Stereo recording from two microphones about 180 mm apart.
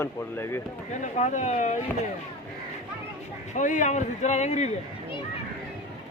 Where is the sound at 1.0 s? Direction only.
45° left (ahead or behind).